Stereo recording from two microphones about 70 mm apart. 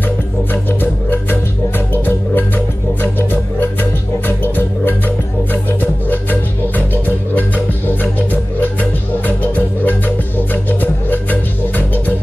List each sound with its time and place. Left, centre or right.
0.5 s music: left